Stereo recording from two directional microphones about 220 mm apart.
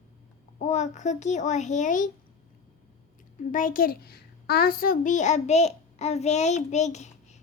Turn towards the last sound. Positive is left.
turn(degrees=30)  # may be behind; listen again after turning